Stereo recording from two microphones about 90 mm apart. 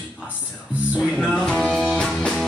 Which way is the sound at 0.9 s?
5° right (ahead or behind).